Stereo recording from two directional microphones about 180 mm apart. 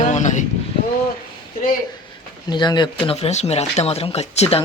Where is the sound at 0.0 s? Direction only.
40° left (ahead or behind).